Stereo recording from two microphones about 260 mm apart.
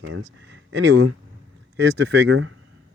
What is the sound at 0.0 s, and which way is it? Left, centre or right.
Speech, right.